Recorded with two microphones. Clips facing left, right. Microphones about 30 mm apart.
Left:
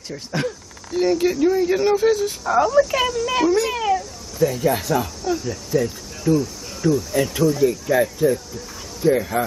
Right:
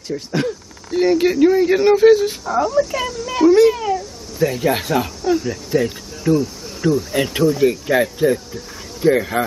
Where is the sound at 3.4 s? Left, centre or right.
Centre.